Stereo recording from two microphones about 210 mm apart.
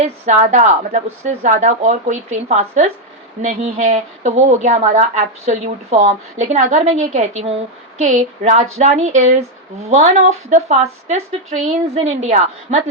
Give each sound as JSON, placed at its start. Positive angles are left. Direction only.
{"t": 0.0, "sound": "speech", "side_deg": -35}